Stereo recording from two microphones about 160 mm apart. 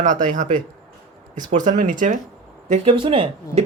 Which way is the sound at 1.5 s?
55° right (ahead or behind).